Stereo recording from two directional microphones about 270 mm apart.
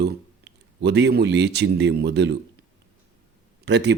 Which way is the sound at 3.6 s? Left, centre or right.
Right.